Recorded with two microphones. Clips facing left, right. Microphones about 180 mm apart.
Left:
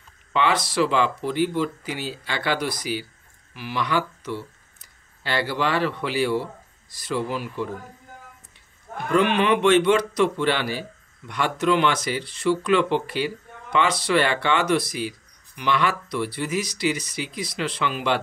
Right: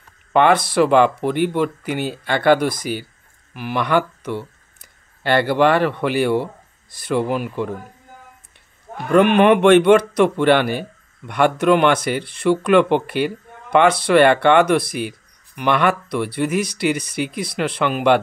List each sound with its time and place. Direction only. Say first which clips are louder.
0.3 s speech: right 8 dB; 55° right (ahead or behind)
9.1 s speech: right 7 dB; 55° right (ahead or behind)